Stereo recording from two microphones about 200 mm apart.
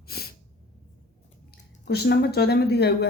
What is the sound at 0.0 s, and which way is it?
Sneeze, 50° left (ahead or behind).